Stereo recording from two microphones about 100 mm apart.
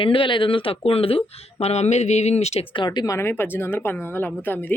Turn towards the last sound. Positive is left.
turn(degrees=20)  # may be behind; listen again after turning